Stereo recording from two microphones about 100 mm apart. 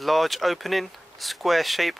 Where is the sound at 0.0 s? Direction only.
Centre (ahead or behind).